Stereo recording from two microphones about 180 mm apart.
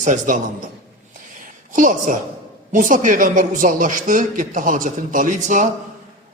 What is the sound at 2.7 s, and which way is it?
A man's voice, 45° right (ahead or behind).